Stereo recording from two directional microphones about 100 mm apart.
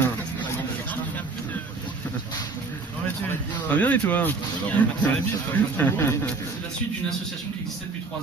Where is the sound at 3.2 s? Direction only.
15° left (ahead or behind).